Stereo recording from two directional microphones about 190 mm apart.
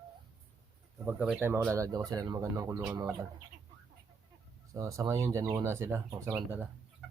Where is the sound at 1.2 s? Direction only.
5° right (ahead or behind).